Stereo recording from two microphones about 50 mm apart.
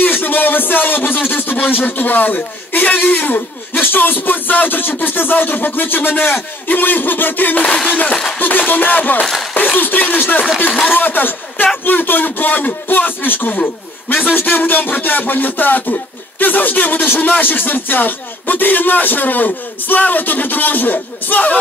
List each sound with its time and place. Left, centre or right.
0.0 s speech: left
7.6 s a sound: left
8.1 s speech: centre
8.4 s speech: left
13.6 s a man's voice: left